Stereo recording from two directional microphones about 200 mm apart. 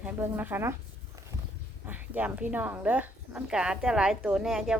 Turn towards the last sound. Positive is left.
turn(degrees=0)  # may be behind; listen again after turning